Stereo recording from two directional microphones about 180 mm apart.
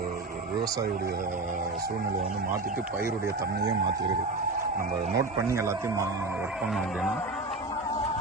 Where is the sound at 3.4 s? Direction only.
65° right (ahead or behind).